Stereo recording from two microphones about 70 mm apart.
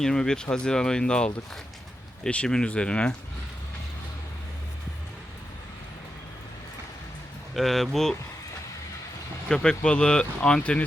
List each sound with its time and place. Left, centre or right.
0.0 s speech: centre
7.5 s speech: centre
9.5 s speech: centre